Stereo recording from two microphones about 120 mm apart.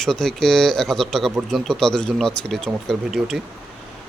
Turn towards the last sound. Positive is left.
turn(degrees=0)  # may be behind; listen again after turning